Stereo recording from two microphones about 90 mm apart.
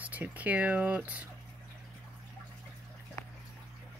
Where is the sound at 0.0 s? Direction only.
20° right (ahead or behind).